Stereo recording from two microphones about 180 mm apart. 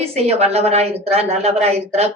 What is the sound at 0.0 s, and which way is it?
Speech, 35° right (ahead or behind).